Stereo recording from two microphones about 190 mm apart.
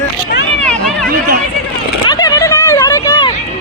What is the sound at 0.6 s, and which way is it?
Run, 5° left (ahead or behind).